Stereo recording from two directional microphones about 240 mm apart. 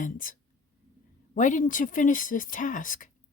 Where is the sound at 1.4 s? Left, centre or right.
Left.